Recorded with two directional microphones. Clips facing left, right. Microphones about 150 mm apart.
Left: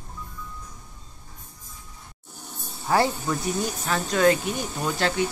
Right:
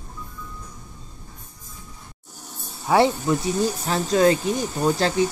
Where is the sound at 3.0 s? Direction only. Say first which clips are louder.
Right 5 dB; 25° right (ahead or behind).